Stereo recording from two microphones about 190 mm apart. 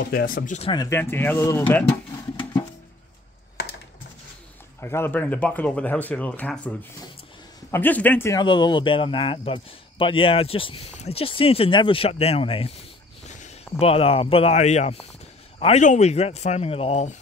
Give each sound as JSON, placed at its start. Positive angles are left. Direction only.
{"t": 0.1, "sound": "speech", "side_deg": 50}
{"t": 0.6, "sound": "speech", "side_deg": 25}
{"t": 3.6, "sound": "computer keyboard", "side_deg": 60}
{"t": 4.7, "sound": "speech", "side_deg": 15}
{"t": 7.7, "sound": "speech", "side_deg": 10}